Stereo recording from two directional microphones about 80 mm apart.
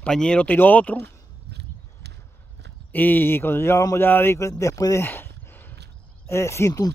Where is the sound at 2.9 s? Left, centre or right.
Left.